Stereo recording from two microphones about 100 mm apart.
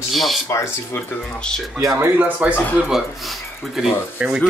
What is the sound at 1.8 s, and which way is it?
Speech, 30° right (ahead or behind).